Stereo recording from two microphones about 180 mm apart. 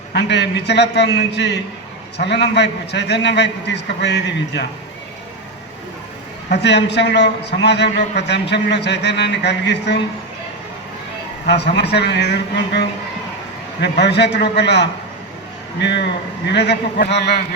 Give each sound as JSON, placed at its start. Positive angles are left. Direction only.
{"t": 0.1, "sound": "a man's voice", "side_deg": 70}
{"t": 6.5, "sound": "a man's voice", "side_deg": 70}
{"t": 11.4, "sound": "a man's voice", "side_deg": 70}
{"t": 13.8, "sound": "a man's voice", "side_deg": 70}